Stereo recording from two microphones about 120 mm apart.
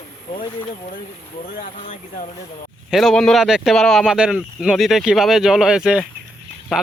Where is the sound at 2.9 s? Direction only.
5° left (ahead or behind).